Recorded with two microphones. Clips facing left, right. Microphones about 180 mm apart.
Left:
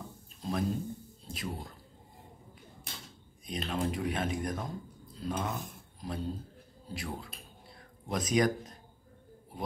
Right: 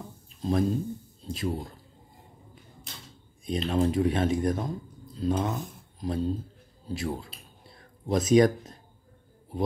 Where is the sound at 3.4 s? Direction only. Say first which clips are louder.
Right 8 dB; 25° right (ahead or behind).